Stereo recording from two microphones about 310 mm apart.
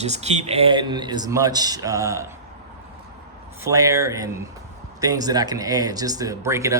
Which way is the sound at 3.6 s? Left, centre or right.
Centre.